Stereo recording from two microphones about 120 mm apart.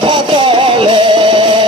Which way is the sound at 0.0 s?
45° right (ahead or behind).